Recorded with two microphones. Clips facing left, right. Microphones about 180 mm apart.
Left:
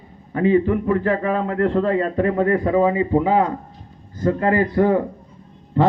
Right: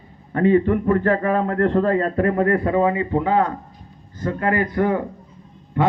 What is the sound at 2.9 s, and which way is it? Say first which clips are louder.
Speech: left 2 dB; 15° left (ahead or behind).